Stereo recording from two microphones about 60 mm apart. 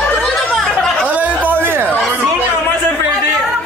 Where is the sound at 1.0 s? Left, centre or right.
Right.